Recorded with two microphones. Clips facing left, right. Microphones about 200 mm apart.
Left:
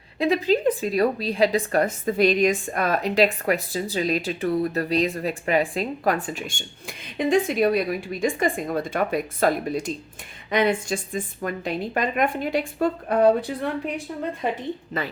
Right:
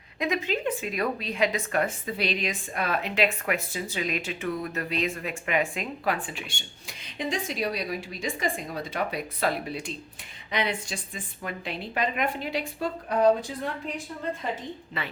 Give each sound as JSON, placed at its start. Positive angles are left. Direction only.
{"t": 0.2, "sound": "a woman's voice", "side_deg": 35}
{"t": 14.9, "sound": "a woman's voice", "side_deg": 40}